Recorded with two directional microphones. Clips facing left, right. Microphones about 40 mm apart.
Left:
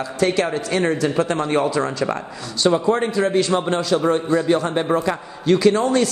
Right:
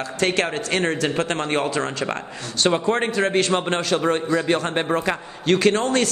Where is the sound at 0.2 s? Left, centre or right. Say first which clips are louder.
Left 2 dB; right.